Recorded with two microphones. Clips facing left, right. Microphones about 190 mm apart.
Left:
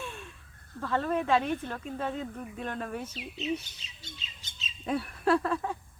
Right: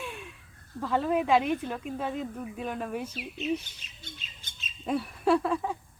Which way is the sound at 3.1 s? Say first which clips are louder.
Right 2 dB; 55° right (ahead or behind).